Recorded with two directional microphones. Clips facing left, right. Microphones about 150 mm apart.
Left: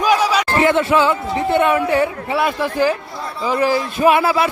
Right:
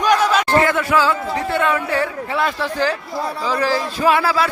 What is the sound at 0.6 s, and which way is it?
A man's voice, 25° left (ahead or behind).